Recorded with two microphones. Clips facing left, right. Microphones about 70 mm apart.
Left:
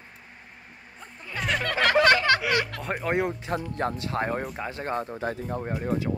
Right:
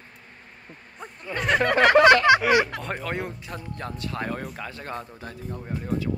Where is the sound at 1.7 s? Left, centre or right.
Right.